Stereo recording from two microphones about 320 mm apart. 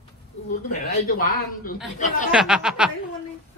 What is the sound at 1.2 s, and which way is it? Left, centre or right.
Speech, left.